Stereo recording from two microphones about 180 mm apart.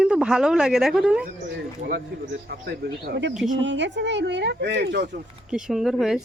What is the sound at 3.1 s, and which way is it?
Speech, 80° right.